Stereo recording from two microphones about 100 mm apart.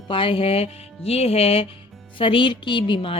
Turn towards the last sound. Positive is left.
turn(degrees=55)  # may be behind; listen again after turning